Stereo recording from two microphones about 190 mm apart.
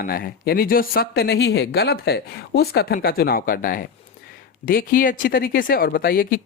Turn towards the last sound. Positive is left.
turn(degrees=50)  # may be behind; listen again after turning